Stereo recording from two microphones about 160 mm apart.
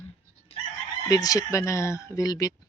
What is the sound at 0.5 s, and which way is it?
Chicken, 40° left (ahead or behind).